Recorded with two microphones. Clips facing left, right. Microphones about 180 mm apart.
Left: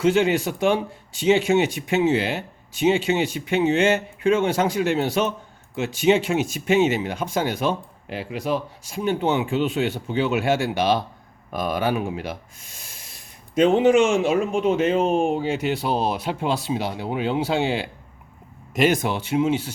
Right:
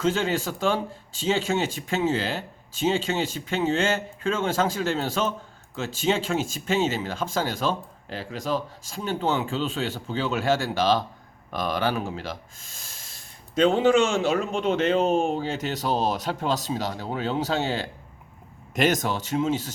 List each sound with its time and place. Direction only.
0.0 s speech: 15° left (ahead or behind)
13.6 s speech: 15° left (ahead or behind)